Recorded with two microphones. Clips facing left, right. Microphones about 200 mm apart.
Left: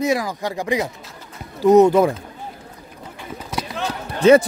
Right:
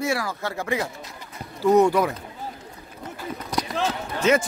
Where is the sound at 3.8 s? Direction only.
35° left (ahead or behind).